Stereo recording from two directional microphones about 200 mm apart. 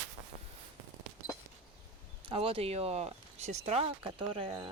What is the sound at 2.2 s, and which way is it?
Speech, 30° right (ahead or behind).